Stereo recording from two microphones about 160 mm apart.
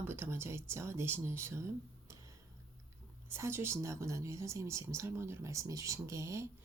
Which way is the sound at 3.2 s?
15° right (ahead or behind).